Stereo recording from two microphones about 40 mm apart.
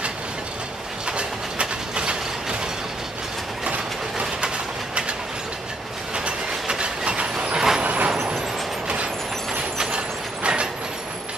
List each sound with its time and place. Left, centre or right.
1.0 s train: right
6.1 s train: right
7.5 s vehicle: centre
7.8 s vehicle: right
8.8 s vehicle: right